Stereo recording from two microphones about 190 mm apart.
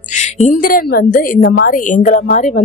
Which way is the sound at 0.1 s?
35° left (ahead or behind).